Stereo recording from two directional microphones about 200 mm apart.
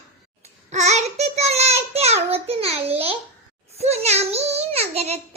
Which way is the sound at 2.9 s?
30° right (ahead or behind).